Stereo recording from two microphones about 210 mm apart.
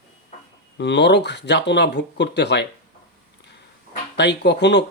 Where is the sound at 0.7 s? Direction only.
55° left (ahead or behind).